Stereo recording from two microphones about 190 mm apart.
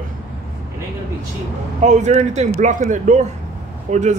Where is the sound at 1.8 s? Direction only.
40° right (ahead or behind).